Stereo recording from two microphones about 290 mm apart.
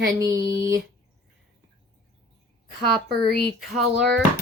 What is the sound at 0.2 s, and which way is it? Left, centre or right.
Speech, centre.